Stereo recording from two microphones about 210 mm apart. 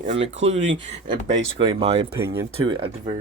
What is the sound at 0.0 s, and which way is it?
Speech, 30° right (ahead or behind).